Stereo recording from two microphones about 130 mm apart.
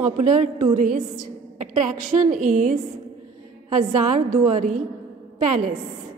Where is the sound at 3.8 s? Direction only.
65° right (ahead or behind).